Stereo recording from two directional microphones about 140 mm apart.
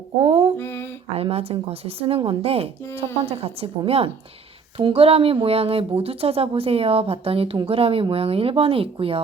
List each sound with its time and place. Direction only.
0.2 s mantra: 40° right (ahead or behind)
0.6 s a sound: 15° left (ahead or behind)
1.1 s speech: 45° right (ahead or behind)